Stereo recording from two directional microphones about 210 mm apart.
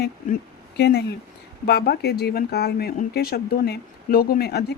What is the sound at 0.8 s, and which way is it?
Speech, 50° left (ahead or behind).